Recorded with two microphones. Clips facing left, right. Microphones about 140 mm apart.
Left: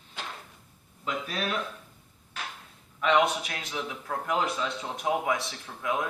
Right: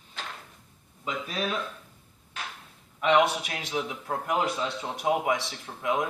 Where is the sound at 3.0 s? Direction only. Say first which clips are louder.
Right 1 dB; 20° right (ahead or behind).